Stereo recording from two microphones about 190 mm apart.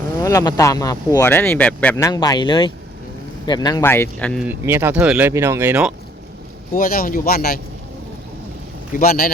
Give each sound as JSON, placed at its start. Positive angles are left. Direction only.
{"t": 0.2, "sound": "speech", "side_deg": 15}
{"t": 2.0, "sound": "speech", "side_deg": 20}
{"t": 4.4, "sound": "speech", "side_deg": -10}
{"t": 6.7, "sound": "speech", "side_deg": 50}
{"t": 9.0, "sound": "speech", "side_deg": 50}